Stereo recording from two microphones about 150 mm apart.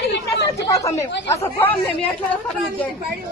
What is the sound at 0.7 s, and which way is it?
Speech, 20° left (ahead or behind).